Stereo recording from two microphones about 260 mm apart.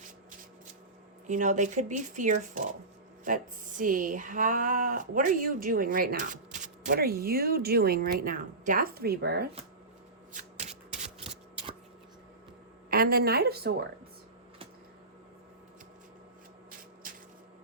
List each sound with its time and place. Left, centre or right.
1.3 s speech: right
10.3 s shuffling cards: right
12.9 s speech: right